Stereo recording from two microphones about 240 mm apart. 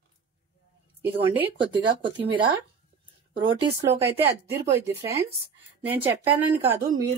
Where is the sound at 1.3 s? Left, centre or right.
Right.